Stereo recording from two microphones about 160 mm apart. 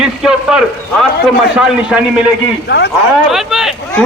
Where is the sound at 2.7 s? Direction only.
90° left.